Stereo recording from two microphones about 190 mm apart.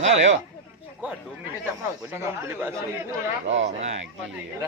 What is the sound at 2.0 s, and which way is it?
Speech, 10° right (ahead or behind).